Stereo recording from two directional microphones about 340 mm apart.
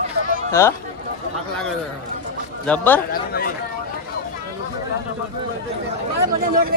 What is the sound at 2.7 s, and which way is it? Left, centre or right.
Speech, centre.